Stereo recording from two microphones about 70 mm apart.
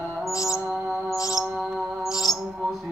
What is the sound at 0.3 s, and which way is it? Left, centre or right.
Music, left.